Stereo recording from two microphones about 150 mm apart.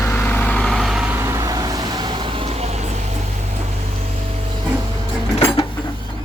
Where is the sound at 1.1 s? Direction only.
20° right (ahead or behind).